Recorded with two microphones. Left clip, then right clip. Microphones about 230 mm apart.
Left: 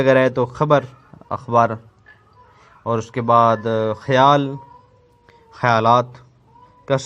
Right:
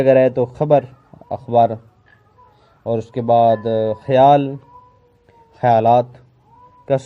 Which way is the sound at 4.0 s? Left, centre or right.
Centre.